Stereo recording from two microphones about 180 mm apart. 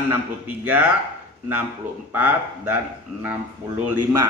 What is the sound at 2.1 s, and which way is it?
A man's voice, 10° right (ahead or behind).